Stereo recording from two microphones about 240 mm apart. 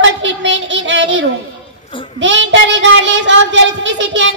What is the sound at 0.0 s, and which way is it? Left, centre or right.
Child singing, right.